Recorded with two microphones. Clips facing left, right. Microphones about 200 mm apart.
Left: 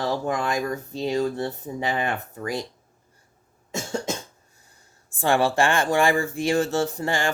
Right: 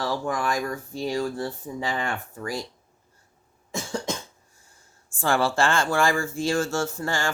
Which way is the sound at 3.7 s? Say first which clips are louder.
Left 1 dB; 25° left (ahead or behind).